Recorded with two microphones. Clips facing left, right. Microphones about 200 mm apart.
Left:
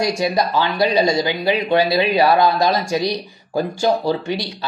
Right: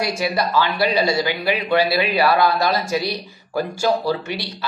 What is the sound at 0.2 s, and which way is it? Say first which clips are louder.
Speech: left 2 dB; 20° left (ahead or behind).